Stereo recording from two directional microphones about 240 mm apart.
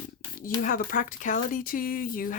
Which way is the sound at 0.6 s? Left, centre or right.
Left.